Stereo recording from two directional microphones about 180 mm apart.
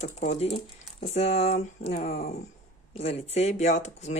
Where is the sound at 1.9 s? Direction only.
45° left (ahead or behind).